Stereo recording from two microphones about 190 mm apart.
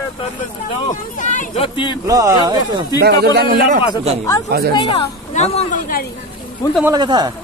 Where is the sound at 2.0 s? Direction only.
15° right (ahead or behind).